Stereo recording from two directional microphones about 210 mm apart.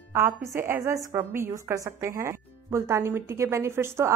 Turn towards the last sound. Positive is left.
turn(degrees=-10)  # may be behind; listen again after turning